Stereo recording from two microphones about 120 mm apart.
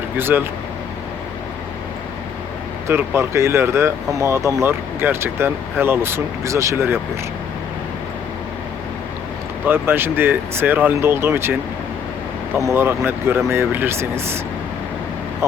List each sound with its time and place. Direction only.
0.2 s speech: 20° right (ahead or behind)
2.8 s speech: 20° right (ahead or behind)
9.6 s speech: 20° right (ahead or behind)
12.5 s speech: 20° right (ahead or behind)